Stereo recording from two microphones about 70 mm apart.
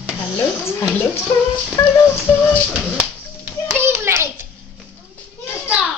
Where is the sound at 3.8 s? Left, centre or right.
Right.